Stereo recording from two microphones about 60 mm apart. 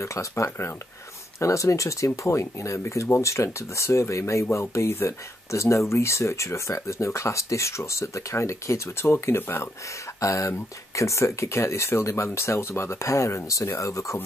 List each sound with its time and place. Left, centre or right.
0.0 s speech: left
10.2 s speech: left